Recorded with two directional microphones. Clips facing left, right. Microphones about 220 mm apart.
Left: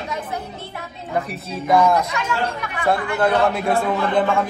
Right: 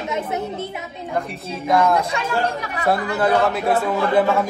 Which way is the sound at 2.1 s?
30° right (ahead or behind).